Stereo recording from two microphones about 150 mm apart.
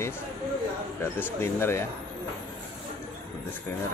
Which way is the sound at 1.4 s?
15° left (ahead or behind).